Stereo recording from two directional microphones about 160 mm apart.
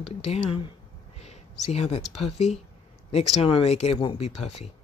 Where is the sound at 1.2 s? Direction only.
40° left (ahead or behind).